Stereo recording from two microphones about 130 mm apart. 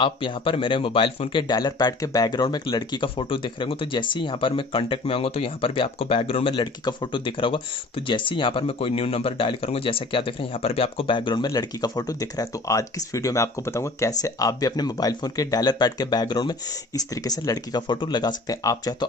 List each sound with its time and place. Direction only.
0.0 s speech: 40° left (ahead or behind)